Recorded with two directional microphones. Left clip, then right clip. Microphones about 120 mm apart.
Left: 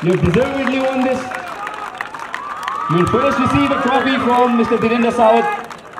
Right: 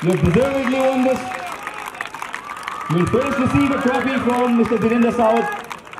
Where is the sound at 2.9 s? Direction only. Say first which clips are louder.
Left 4 dB; 45° left (ahead or behind).